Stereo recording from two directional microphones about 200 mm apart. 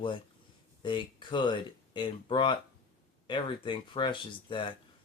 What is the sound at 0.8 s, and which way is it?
Speech, 25° left (ahead or behind).